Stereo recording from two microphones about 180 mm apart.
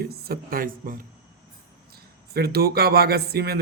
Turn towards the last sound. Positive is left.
turn(degrees=-60)  # may be behind; listen again after turning